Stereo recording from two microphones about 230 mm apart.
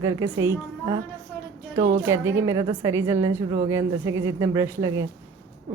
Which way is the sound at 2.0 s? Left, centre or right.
Centre.